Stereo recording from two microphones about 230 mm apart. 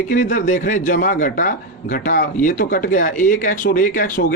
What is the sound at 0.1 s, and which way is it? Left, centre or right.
A man's voice, left.